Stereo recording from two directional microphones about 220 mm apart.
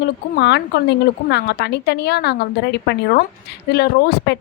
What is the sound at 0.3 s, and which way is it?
A woman's voice, 50° left (ahead or behind).